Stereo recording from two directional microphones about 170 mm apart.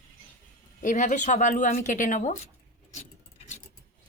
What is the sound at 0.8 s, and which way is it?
Speech, 45° left (ahead or behind).